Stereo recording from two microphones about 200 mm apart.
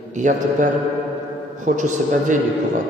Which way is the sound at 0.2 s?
40° right (ahead or behind).